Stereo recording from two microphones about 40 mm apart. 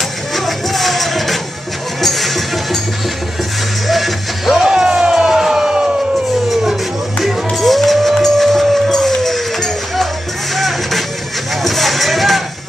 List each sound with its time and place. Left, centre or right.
0.3 s music: centre
3.8 s music: centre
4.6 s music: centre
5.1 s a sound: centre
6.5 s music: centre
7.2 s music: centre